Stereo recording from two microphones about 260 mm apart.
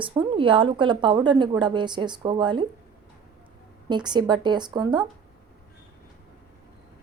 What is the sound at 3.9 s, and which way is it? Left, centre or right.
A woman's voice, centre.